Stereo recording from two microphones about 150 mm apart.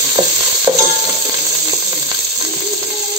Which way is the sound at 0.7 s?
15° right (ahead or behind).